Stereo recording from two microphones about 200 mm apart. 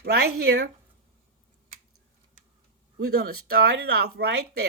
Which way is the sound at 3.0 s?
55° right (ahead or behind).